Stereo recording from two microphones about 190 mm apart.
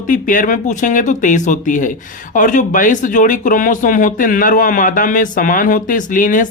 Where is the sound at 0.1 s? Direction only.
45° left (ahead or behind).